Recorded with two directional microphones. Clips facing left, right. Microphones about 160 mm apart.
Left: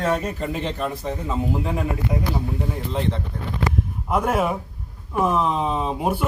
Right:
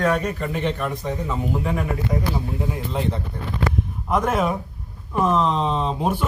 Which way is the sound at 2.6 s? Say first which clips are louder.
Right 1 dB; 5° right (ahead or behind).